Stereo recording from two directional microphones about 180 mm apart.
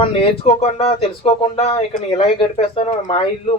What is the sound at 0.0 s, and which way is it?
Speech, 35° left (ahead or behind).